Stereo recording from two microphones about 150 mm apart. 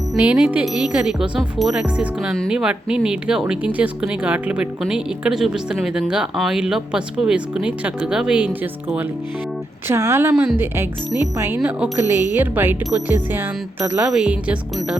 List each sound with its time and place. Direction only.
0.1 s speech: 5° right (ahead or behind)
9.9 s speech: 15° right (ahead or behind)